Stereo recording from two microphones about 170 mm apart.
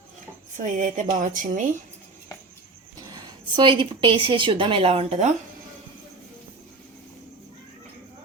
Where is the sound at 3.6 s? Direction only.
25° right (ahead or behind).